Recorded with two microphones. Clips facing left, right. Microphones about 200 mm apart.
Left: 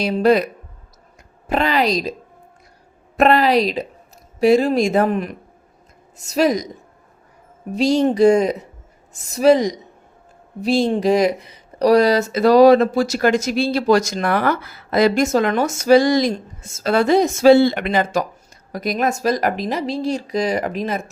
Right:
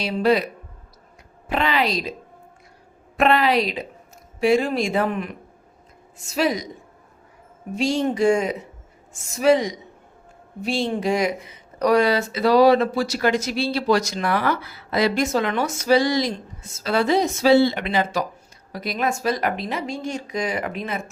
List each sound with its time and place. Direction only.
0.0 s speech: 45° left (ahead or behind)
3.2 s speech: 40° left (ahead or behind)
7.8 s speech: 40° left (ahead or behind)